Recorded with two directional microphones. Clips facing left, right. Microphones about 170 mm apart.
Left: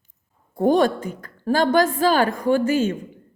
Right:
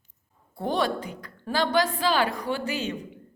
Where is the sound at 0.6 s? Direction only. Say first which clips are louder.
Left 9 dB; 45° left (ahead or behind).